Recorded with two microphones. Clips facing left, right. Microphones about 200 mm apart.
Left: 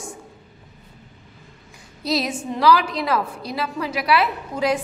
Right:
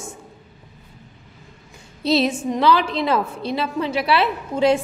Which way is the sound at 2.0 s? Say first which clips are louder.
Right 5 dB; 25° right (ahead or behind).